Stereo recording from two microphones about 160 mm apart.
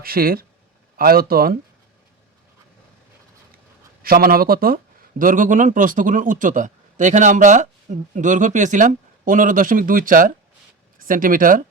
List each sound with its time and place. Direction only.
0.0 s speech: 65° right (ahead or behind)
4.0 s speech: 65° right (ahead or behind)
5.2 s a man's voice: 55° right (ahead or behind)